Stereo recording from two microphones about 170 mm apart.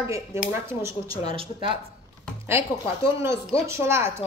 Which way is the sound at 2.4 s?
15° right (ahead or behind).